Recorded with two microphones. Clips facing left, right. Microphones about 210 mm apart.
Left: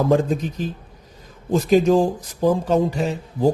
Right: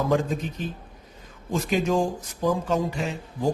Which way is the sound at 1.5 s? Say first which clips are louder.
Left 8 dB; 35° left (ahead or behind).